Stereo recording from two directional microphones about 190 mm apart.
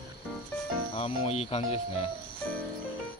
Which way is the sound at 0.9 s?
30° left (ahead or behind).